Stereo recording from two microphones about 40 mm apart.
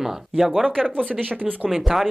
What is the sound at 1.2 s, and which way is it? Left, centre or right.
Speech, right.